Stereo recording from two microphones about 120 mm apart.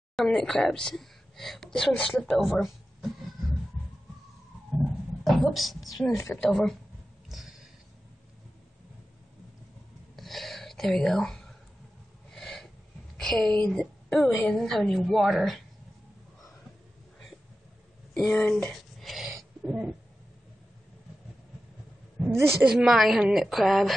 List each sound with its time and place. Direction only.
0.1 s a woman's voice: 5° left (ahead or behind)
5.2 s speech: centre (ahead or behind)
6.0 s a woman's voice: 25° left (ahead or behind)
6.3 s speech: 5° left (ahead or behind)
7.2 s a sound: centre (ahead or behind)
10.1 s a sound: centre (ahead or behind)
12.3 s snort: centre (ahead or behind)
13.2 s a woman's voice: 5° left (ahead or behind)
18.3 s a sound: 5° left (ahead or behind)
22.2 s a woman's voice: 5° right (ahead or behind)